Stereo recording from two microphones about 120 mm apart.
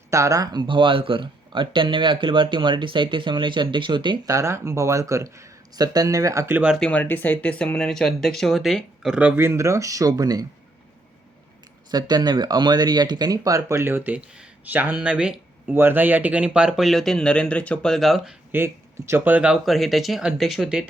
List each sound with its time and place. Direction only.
0.1 s speech: 25° right (ahead or behind)
4.3 s speech: 25° right (ahead or behind)
6.7 s speech: 10° left (ahead or behind); by 10.4 s 30° right (ahead or behind)
11.9 s speech: 35° right (ahead or behind); by 18.3 s centre (ahead or behind)
18.5 s speech: 20° right (ahead or behind); by 20.8 s 5° right (ahead or behind)